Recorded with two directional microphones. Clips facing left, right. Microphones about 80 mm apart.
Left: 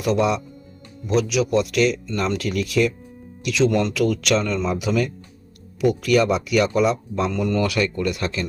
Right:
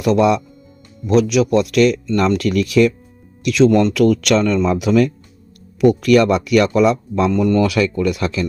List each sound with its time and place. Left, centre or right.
1.0 s speech: right
7.3 s speech: right